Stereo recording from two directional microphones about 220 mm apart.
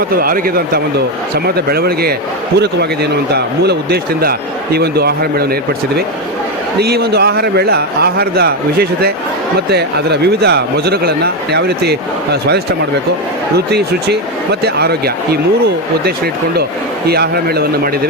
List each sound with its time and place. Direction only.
0.2 s a man's voice: 40° right (ahead or behind)
6.7 s speech: 45° right (ahead or behind)
13.7 s speech: 50° right (ahead or behind)